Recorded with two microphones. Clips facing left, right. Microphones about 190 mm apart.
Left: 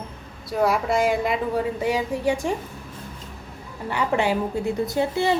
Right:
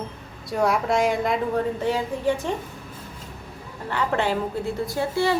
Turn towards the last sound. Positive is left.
turn(degrees=20)  # may be behind; listen again after turning